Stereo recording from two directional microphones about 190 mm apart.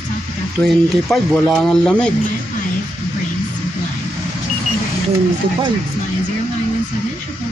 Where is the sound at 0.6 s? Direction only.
10° left (ahead or behind).